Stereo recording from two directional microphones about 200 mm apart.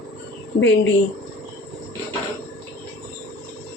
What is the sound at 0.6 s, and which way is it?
Speech, 65° left (ahead or behind).